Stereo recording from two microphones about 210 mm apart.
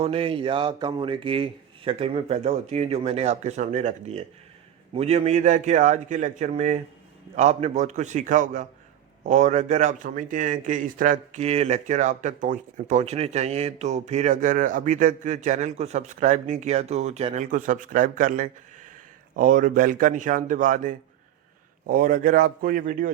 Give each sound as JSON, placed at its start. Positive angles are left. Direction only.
{"t": 0.0, "sound": "speech", "side_deg": -25}